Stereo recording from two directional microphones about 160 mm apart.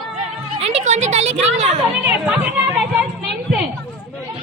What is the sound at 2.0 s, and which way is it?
Chatter, 10° right (ahead or behind).